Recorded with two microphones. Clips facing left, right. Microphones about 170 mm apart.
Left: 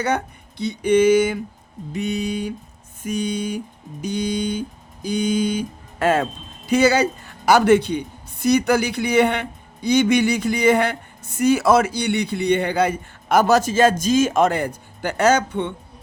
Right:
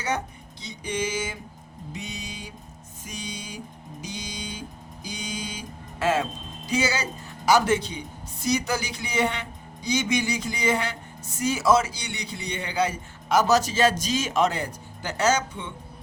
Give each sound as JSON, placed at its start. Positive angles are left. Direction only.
{"t": 0.6, "sound": "speech", "side_deg": 60}